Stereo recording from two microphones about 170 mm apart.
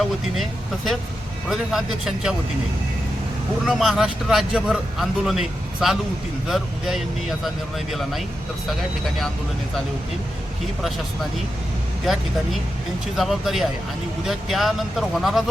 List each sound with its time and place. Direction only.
1.5 s speech: centre (ahead or behind)
3.7 s speech: centre (ahead or behind)
12.0 s speech: centre (ahead or behind)